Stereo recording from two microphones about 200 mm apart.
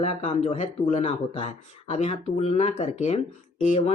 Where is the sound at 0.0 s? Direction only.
35° left (ahead or behind).